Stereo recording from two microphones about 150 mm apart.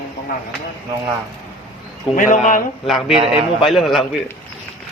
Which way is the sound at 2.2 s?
60° left (ahead or behind).